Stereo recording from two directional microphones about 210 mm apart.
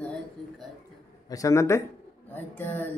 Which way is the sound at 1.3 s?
15° left (ahead or behind).